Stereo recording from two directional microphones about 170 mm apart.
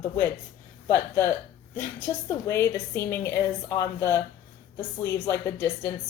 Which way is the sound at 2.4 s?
15° left (ahead or behind).